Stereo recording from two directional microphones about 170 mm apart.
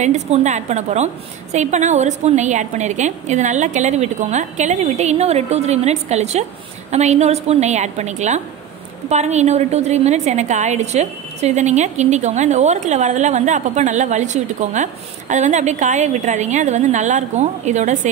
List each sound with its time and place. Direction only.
0.0 s a woman's voice: 45° right (ahead or behind)